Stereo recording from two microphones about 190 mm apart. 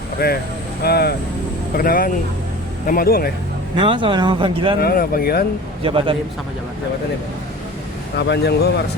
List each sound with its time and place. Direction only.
0.2 s speech: 55° left (ahead or behind)
3.8 s speech: 25° right (ahead or behind)
4.8 s speech: 50° left (ahead or behind)
5.8 s speech: 30° right (ahead or behind)
8.2 s speech: 60° left (ahead or behind)